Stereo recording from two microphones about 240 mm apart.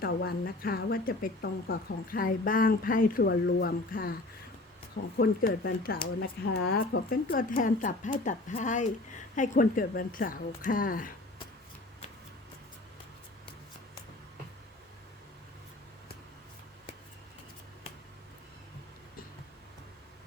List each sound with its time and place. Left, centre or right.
0.0 s speech: left
5.1 s speech: left